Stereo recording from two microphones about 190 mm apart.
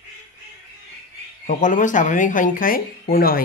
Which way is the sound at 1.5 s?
40° left (ahead or behind).